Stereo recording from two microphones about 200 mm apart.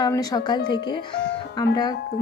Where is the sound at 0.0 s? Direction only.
20° left (ahead or behind).